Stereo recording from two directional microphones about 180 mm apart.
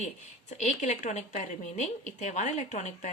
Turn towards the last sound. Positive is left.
turn(degrees=40)  # may be behind; listen again after turning